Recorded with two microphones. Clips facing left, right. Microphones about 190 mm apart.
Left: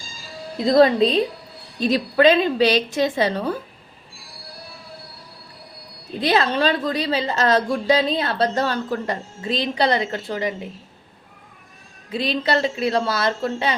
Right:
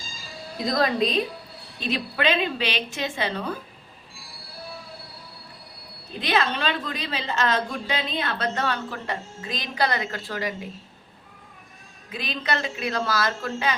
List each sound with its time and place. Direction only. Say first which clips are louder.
0.6 s a woman's voice: left 8 dB; 30° left (ahead or behind)
6.1 s a woman's voice: left 5 dB; 35° left (ahead or behind)
12.1 s a woman's voice: left 7 dB; 30° left (ahead or behind)